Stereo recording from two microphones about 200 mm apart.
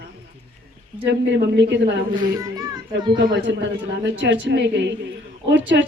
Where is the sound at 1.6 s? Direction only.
60° right (ahead or behind).